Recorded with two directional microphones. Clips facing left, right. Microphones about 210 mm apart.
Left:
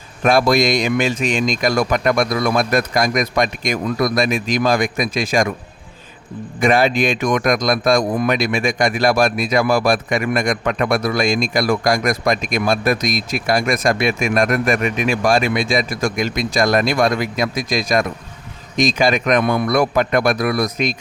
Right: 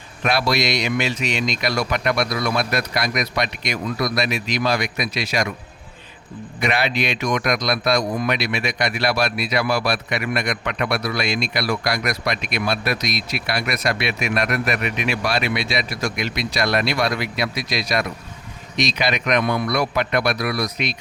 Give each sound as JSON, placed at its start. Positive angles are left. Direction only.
{"t": 0.2, "sound": "speech", "side_deg": 45}
{"t": 6.6, "sound": "speech", "side_deg": 45}